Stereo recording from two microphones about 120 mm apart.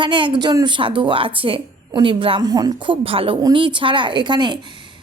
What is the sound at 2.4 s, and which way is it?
Speech, 35° right (ahead or behind).